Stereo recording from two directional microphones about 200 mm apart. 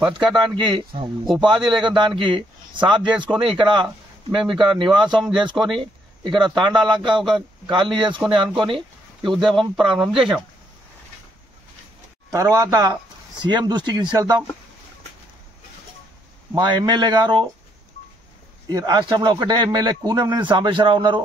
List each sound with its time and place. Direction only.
0.1 s speech: 25° right (ahead or behind)
7.2 s a man's voice: centre (ahead or behind)
7.6 s speech: 25° right (ahead or behind)
12.3 s speech: 15° right (ahead or behind)
16.5 s speech: 20° right (ahead or behind)
18.7 s speech: 20° right (ahead or behind)